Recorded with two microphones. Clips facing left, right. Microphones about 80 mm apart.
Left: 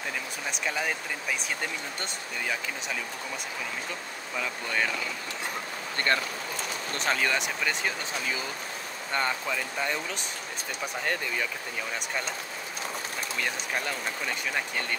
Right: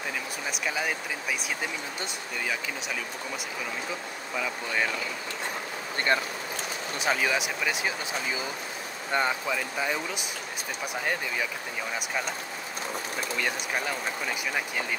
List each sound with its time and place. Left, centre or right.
0.5 s speech: centre
6.1 s speech: centre